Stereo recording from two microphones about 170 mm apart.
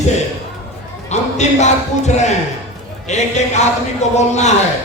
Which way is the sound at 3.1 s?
40° left (ahead or behind).